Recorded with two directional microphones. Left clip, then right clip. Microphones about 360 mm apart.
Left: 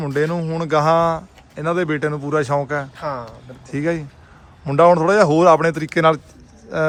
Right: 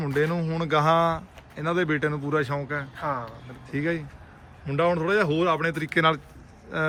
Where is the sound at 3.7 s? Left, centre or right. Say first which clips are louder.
Left 6 dB; centre.